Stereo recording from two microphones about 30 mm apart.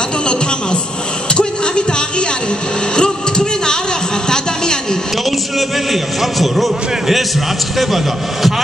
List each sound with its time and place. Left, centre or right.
1.3 s music: left
3.0 s vehicle: left
6.4 s a man's voice: centre